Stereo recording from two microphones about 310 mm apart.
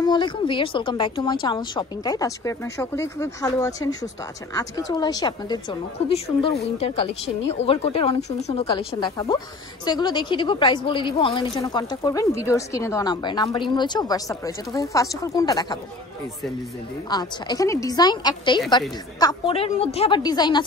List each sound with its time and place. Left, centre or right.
0.0 s a woman's voice: centre
17.1 s a woman's voice: centre